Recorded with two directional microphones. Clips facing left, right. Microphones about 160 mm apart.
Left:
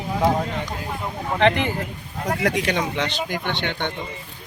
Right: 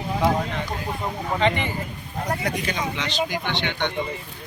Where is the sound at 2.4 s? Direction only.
80° left; by 3.9 s 50° left (ahead or behind).